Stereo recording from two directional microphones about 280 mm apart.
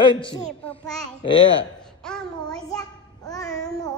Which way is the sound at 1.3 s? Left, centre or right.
Left.